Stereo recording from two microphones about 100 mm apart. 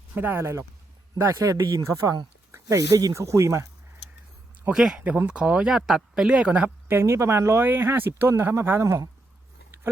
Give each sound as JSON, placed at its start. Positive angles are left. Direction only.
{"t": 0.1, "sound": "speech", "side_deg": -20}
{"t": 4.7, "sound": "speech", "side_deg": -5}